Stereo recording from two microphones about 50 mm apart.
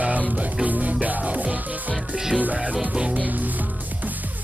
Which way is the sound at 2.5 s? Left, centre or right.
Centre.